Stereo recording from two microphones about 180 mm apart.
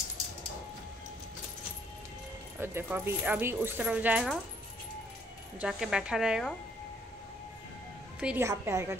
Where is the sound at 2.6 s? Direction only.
10° right (ahead or behind).